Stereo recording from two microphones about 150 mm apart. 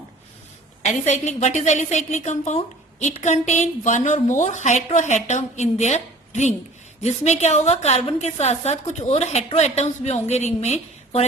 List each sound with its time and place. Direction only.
0.9 s a woman's voice: 50° left (ahead or behind)